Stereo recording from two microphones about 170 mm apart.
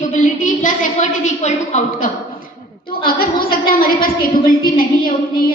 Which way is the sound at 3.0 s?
60° left (ahead or behind).